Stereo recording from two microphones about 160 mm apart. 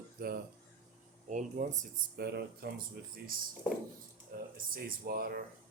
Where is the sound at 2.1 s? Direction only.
90° right.